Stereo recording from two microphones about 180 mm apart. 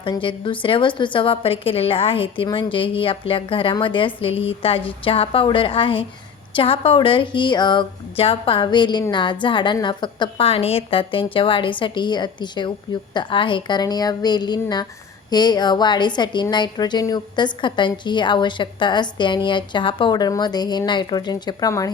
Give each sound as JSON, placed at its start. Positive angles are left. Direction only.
{"t": 0.0, "sound": "a woman's voice", "side_deg": 30}